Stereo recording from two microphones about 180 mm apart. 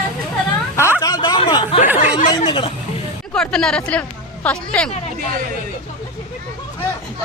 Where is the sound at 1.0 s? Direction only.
20° left (ahead or behind).